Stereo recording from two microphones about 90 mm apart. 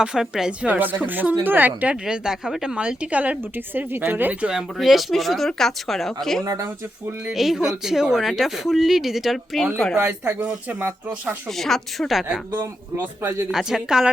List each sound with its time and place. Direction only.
0.0 s speech: 5° right (ahead or behind)
4.8 s speech: centre (ahead or behind)
7.3 s speech: centre (ahead or behind)
10.0 s speech: 20° right (ahead or behind)
11.5 s speech: 5° left (ahead or behind)
12.5 s speech: 20° right (ahead or behind)
13.5 s speech: 5° right (ahead or behind)